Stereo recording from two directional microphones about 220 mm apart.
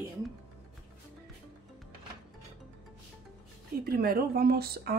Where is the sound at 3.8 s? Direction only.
45° right (ahead or behind).